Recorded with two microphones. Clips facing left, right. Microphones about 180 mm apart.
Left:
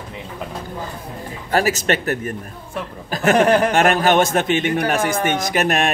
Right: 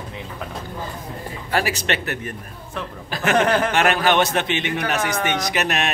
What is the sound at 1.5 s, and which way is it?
A man's voice, 45° left (ahead or behind).